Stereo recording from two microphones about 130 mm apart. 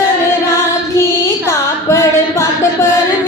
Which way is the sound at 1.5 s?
20° left (ahead or behind).